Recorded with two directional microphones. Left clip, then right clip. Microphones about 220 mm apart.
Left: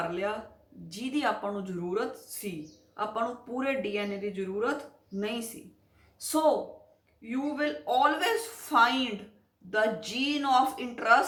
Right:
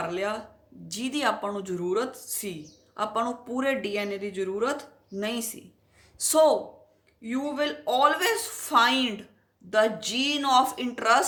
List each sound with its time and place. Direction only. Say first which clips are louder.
0.1 s speech: right 3 dB; 50° right (ahead or behind)